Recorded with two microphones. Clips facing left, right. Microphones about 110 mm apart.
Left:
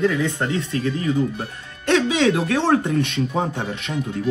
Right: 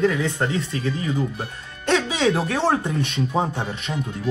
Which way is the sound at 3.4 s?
10° right (ahead or behind).